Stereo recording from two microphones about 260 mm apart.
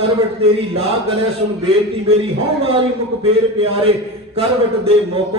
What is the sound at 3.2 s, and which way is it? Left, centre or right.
Speech, right.